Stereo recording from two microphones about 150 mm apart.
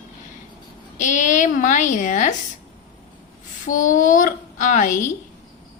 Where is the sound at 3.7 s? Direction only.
60° left (ahead or behind).